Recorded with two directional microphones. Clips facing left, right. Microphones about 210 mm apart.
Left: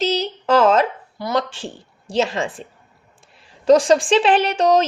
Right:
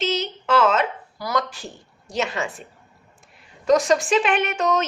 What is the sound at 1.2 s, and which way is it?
A woman's voice, 30° left (ahead or behind).